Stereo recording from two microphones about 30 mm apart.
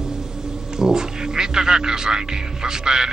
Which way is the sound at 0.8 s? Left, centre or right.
Right.